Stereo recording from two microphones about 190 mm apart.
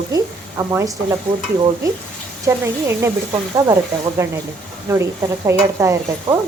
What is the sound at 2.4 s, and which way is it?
Speech, 15° right (ahead or behind).